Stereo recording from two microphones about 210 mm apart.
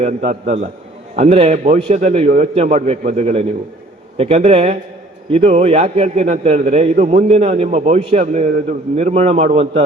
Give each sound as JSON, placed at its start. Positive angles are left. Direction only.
{"t": 0.0, "sound": "a man's voice", "side_deg": -30}